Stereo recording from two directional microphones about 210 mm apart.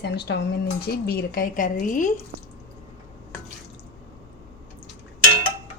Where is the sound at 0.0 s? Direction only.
50° left (ahead or behind).